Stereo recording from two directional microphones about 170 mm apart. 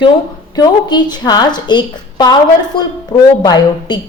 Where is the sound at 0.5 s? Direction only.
25° left (ahead or behind).